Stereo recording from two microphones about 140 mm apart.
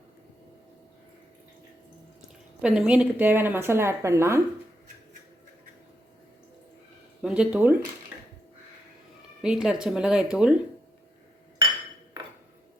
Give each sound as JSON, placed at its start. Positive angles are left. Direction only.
{"t": 2.6, "sound": "a woman's voice", "side_deg": -5}
{"t": 7.2, "sound": "speech", "side_deg": -5}
{"t": 9.4, "sound": "a woman's voice", "side_deg": -5}